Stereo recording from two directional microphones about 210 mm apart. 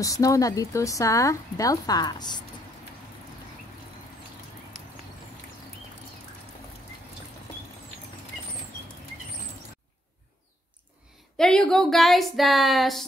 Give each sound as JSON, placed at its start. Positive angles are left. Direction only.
{"t": 0.0, "sound": "speech", "side_deg": 15}
{"t": 11.3, "sound": "speech", "side_deg": 5}